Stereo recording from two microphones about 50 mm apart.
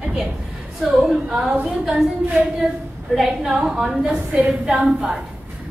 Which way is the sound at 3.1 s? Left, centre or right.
Centre.